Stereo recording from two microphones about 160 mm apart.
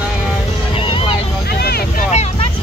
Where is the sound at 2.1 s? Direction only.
45° left (ahead or behind).